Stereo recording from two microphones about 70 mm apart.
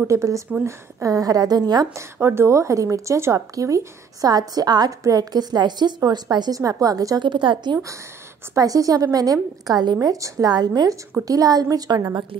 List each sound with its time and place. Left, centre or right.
0.0 s a woman's voice: right
1.0 s a woman's voice: right
2.1 s a woman's voice: right
4.3 s a woman's voice: right
6.6 s a woman's voice: right
7.2 s a woman's voice: right
8.5 s a woman's voice: right
9.9 s a woman's voice: right
11.2 s a woman's voice: right
11.9 s speech: right